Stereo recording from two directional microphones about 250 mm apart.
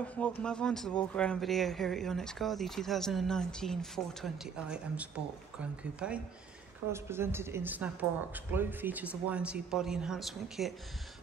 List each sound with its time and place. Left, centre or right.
0.0 s speech: centre